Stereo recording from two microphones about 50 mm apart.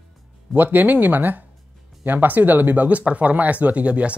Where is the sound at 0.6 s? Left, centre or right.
Right.